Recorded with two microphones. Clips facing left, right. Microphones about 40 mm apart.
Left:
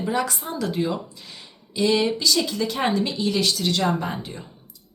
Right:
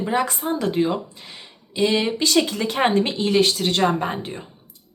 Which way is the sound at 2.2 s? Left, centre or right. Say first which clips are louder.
Right 3 dB; right.